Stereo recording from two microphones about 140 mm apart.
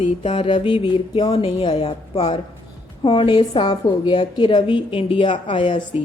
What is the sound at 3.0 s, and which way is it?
A woman's voice, 35° left (ahead or behind).